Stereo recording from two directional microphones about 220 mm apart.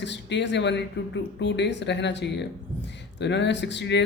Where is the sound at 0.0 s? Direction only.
55° left (ahead or behind).